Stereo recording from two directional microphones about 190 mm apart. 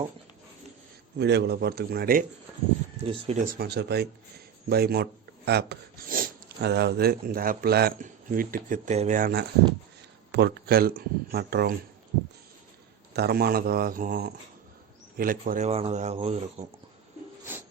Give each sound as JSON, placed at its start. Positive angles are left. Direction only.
{"t": 1.2, "sound": "a man's voice", "side_deg": -60}
{"t": 3.0, "sound": "speech", "side_deg": -30}
{"t": 3.4, "sound": "a man's voice", "side_deg": -55}
{"t": 13.1, "sound": "speech", "side_deg": -55}